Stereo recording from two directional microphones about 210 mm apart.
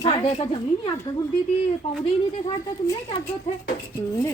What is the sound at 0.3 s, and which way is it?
Speech, 30° left (ahead or behind).